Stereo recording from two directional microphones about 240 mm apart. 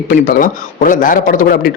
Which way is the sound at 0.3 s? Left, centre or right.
Left.